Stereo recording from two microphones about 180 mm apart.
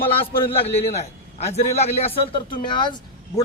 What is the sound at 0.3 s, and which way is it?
A man's voice, 30° left (ahead or behind).